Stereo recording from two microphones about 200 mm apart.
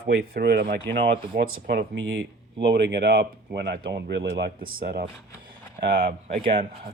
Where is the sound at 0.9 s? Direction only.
25° right (ahead or behind).